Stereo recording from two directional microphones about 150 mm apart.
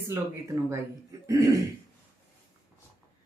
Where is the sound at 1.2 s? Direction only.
20° right (ahead or behind).